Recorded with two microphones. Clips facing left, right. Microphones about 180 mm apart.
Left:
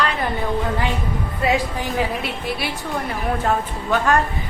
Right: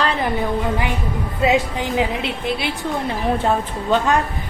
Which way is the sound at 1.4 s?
20° right (ahead or behind).